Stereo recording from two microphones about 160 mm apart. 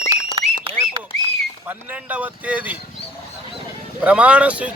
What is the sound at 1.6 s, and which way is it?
Speech, 10° right (ahead or behind).